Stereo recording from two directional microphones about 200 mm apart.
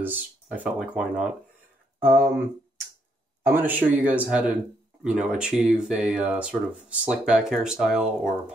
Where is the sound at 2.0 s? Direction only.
50° right (ahead or behind).